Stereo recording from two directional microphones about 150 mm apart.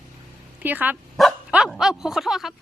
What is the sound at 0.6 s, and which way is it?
Speech, 10° right (ahead or behind).